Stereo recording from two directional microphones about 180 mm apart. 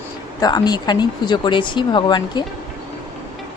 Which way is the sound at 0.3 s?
20° left (ahead or behind).